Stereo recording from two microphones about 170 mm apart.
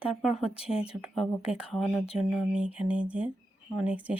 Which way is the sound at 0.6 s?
35° left (ahead or behind).